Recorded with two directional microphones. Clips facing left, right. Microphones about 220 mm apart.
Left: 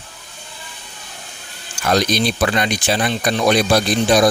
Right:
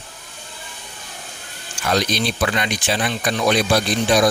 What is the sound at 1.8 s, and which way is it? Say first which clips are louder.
Speech: left 3 dB; 40° left (ahead or behind).